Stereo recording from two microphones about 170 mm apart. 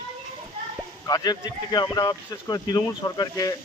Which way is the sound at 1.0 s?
25° left (ahead or behind).